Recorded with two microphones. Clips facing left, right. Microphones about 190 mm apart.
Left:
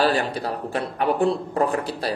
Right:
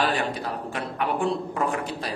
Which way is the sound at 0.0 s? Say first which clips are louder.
Left 4 dB; 35° left (ahead or behind).